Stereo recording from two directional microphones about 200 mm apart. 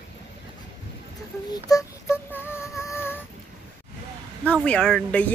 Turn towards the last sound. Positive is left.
turn(degrees=5)  # may be behind; listen again after turning